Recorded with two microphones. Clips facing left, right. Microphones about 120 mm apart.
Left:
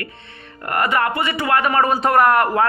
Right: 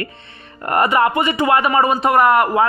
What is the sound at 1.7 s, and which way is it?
Speech, 5° right (ahead or behind).